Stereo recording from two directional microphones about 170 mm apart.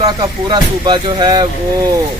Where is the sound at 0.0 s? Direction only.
25° right (ahead or behind).